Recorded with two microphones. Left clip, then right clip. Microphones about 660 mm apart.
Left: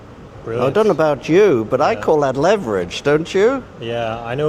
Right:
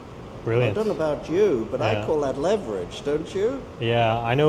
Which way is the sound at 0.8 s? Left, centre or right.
Left.